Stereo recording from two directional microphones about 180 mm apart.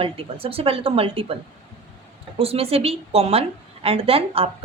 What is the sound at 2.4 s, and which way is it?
Speech, 35° right (ahead or behind).